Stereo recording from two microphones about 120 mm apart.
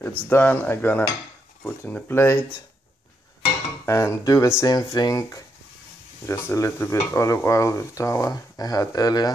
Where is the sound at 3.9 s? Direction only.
25° left (ahead or behind).